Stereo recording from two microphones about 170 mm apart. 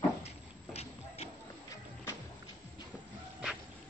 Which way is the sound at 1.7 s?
15° left (ahead or behind).